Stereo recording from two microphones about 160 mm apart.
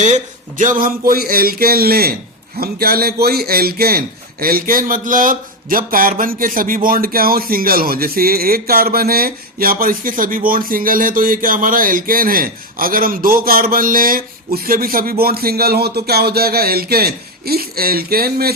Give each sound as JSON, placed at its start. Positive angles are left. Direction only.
{"t": 0.0, "sound": "a man's voice", "side_deg": -50}